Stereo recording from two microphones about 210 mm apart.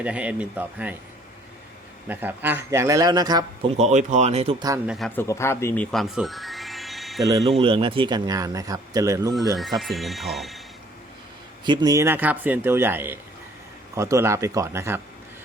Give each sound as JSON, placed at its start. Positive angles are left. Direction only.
{"t": 0.0, "sound": "speech", "side_deg": -5}
{"t": 2.0, "sound": "speech", "side_deg": -10}
{"t": 3.8, "sound": "speech", "side_deg": -35}
{"t": 4.9, "sound": "speech", "side_deg": 0}
{"t": 7.6, "sound": "speech", "side_deg": -25}
{"t": 9.6, "sound": "speech", "side_deg": 0}
{"t": 11.6, "sound": "speech", "side_deg": -20}